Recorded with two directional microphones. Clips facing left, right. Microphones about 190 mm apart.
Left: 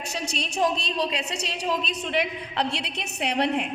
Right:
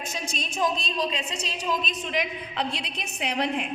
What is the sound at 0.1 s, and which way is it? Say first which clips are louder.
A woman's voice: left 3 dB; 70° left (ahead or behind).